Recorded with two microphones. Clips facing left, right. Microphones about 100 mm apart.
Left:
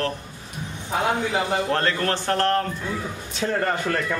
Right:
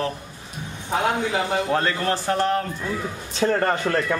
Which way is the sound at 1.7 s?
10° right (ahead or behind).